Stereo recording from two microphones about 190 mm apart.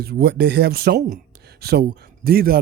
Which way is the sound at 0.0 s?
55° right (ahead or behind).